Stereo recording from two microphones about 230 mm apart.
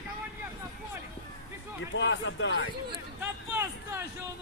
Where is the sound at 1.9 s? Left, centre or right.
Left.